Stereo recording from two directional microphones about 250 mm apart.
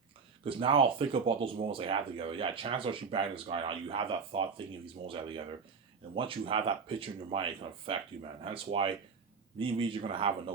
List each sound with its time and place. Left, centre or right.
0.4 s speech: right
6.1 s speech: right